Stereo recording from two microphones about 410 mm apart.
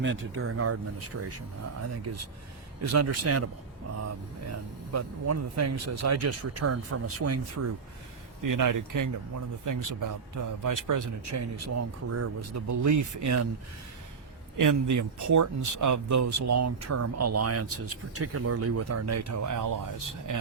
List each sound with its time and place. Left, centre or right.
0.0 s speech: right
2.8 s speech: right
4.9 s speech: right
8.4 s speech: right
14.6 s speech: right